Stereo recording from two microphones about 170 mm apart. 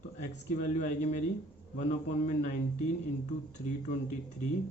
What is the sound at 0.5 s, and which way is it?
A man's voice, 45° left (ahead or behind).